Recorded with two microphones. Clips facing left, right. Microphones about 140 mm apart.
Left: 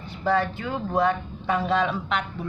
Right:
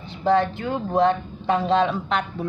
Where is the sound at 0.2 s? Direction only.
20° right (ahead or behind).